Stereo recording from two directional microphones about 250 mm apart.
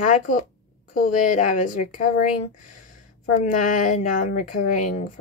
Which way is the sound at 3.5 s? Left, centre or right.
Left.